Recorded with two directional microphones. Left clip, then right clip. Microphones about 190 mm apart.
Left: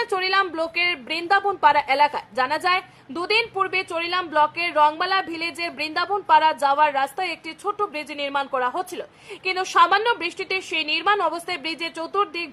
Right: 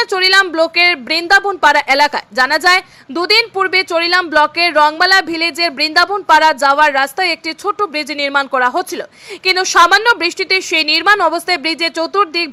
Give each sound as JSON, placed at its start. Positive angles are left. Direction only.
{"t": 0.0, "sound": "a woman's voice", "side_deg": -20}